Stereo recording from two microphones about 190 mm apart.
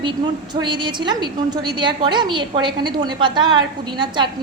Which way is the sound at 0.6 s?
25° right (ahead or behind).